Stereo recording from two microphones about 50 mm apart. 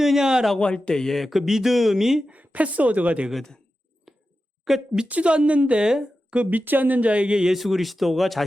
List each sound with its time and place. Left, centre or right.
0.0 s a man's voice: centre
0.6 s speech: centre
2.2 s speech: right
4.7 s speech: centre
5.0 s speech: right
5.8 s a woman's voice: centre
6.4 s speech: right; by 7.6 s centre
7.6 s speech: centre